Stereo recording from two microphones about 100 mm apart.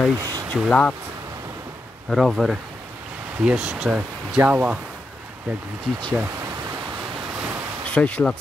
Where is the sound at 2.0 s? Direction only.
Centre (ahead or behind).